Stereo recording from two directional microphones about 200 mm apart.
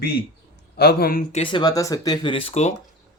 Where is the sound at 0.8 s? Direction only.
50° left (ahead or behind).